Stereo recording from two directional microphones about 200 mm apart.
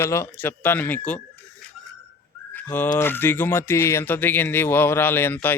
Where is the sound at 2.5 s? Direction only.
10° left (ahead or behind).